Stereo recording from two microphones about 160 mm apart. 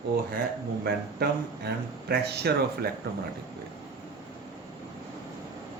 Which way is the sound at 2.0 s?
90° right.